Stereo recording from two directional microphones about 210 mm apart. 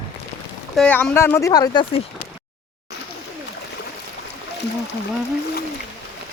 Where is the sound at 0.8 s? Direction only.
5° left (ahead or behind).